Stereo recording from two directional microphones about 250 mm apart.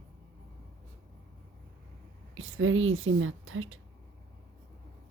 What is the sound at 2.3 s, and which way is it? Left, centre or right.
A woman's voice, right.